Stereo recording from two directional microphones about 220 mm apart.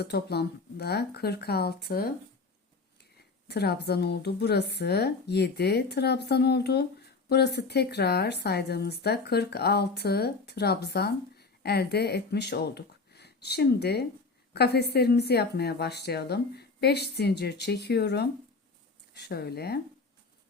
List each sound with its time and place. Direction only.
0.0 s speech: 50° left (ahead or behind)
3.5 s speech: 45° left (ahead or behind)